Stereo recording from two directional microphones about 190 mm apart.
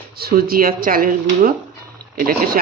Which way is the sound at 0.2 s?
50° right (ahead or behind).